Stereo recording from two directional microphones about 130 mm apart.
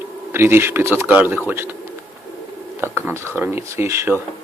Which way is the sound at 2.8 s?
20° right (ahead or behind).